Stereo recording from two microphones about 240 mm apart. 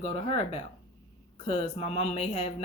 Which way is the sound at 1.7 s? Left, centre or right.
Left.